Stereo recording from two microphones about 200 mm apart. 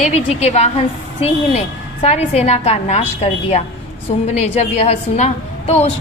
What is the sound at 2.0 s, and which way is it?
A woman's voice, 30° left (ahead or behind).